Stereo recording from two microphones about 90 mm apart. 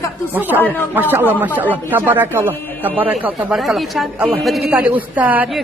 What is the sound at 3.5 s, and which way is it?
Speech, centre (ahead or behind).